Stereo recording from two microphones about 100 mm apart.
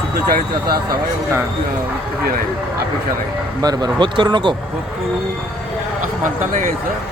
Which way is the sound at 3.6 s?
40° right (ahead or behind).